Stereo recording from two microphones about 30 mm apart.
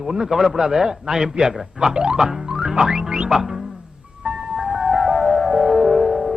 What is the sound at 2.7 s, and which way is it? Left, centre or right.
Speech, right.